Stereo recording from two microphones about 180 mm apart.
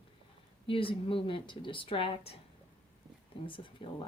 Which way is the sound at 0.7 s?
30° left (ahead or behind).